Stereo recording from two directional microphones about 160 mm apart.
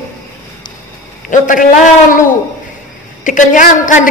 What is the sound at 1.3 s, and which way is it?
Speech, 55° left (ahead or behind).